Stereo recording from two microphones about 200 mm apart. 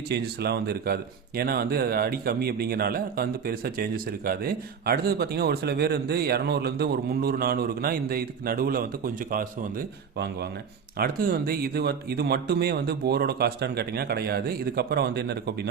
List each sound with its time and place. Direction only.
0.1 s speech: 55° right (ahead or behind)